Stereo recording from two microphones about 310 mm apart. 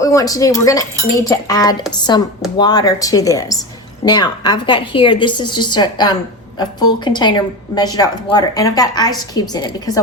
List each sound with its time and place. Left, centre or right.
0.0 s a woman's voice: centre